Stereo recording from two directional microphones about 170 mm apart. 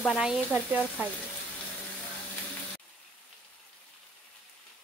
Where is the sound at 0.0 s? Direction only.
5° right (ahead or behind).